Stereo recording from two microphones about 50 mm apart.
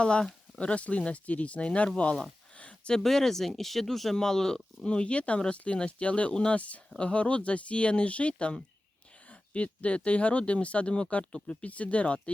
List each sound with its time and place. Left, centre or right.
0.0 s speech: centre
2.6 s a sound: left
3.0 s speech: centre; by 12.3 s left